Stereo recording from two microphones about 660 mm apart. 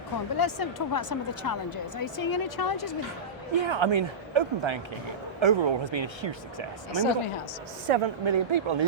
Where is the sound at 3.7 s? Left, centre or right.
Right.